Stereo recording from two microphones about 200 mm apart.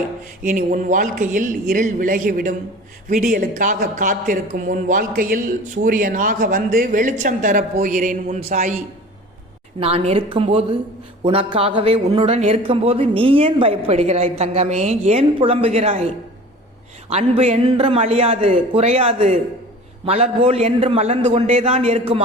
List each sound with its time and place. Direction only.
0.4 s a man's voice: 40° right (ahead or behind)
9.8 s speech: 30° right (ahead or behind)
17.1 s speech: 35° right (ahead or behind)